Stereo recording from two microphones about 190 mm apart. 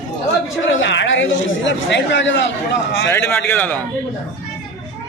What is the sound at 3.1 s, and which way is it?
Speech, 10° left (ahead or behind).